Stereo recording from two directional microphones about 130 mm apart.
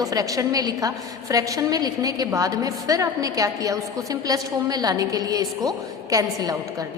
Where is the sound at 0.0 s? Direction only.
25° right (ahead or behind).